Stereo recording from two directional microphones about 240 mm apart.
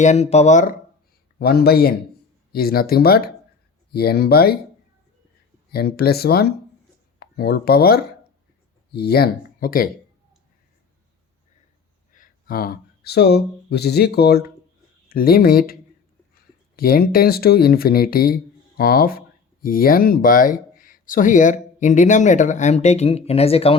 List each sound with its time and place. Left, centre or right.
0.0 s speech: left
5.7 s speech: left
12.1 s speech: left